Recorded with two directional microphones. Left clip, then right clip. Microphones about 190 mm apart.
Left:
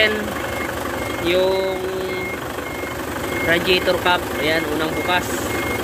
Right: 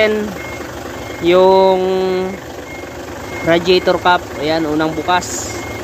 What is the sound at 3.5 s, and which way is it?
Speech, 25° right (ahead or behind).